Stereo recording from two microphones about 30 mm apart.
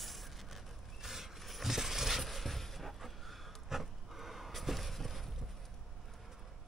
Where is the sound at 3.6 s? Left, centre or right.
Centre.